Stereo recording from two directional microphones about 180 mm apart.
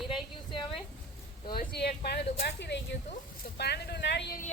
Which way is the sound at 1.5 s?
60° left (ahead or behind).